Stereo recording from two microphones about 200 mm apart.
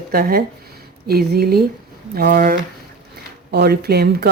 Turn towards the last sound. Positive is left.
turn(degrees=-55)  # may be behind; listen again after turning